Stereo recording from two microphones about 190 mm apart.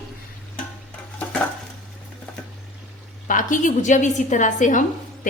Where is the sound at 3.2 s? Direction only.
45° left (ahead or behind).